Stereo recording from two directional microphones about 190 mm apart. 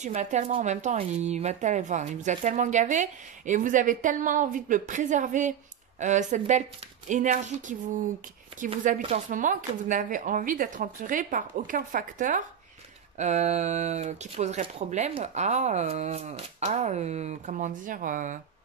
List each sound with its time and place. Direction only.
0.0 s speech: 40° right (ahead or behind)
9.0 s speech: 40° right (ahead or behind)